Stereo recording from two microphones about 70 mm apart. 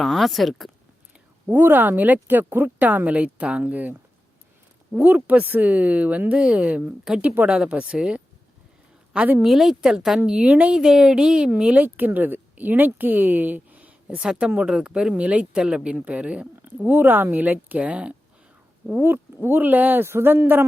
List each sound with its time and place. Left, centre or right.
0.0 s a woman's voice: centre
1.5 s a woman's voice: right
5.0 s a woman's voice: right
9.1 s a woman's voice: right
9.4 s a woman's voice: centre; by 10.8 s right
10.8 s a woman's voice: centre
18.9 s speech: right